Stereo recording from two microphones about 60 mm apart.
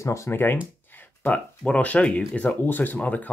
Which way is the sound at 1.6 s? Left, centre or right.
Left.